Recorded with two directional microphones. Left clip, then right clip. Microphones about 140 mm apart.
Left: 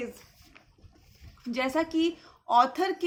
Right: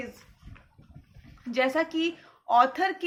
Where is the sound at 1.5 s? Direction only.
35° left (ahead or behind).